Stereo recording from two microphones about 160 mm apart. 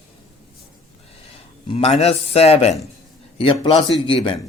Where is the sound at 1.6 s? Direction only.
40° left (ahead or behind).